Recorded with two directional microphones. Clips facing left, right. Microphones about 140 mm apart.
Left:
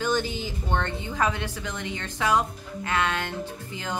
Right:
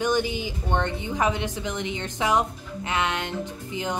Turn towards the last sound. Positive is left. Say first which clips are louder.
# right 3 dB
turn(degrees=-20)  # may be behind; listen again after turning